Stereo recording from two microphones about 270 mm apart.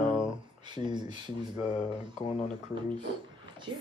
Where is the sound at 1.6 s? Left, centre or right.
Left.